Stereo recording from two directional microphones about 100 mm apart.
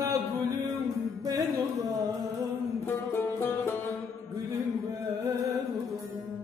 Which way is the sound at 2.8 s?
20° left (ahead or behind).